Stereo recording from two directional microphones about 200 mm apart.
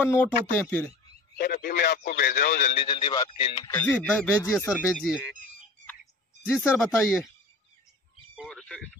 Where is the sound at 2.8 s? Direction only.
25° left (ahead or behind).